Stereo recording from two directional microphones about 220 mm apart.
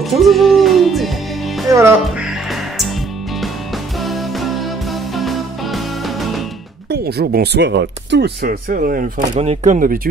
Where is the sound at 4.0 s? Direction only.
Centre (ahead or behind).